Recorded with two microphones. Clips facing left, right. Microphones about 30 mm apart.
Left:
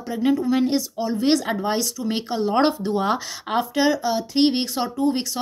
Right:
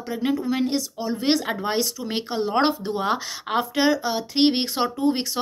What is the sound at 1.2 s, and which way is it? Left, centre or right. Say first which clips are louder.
Speech: left 2 dB; centre.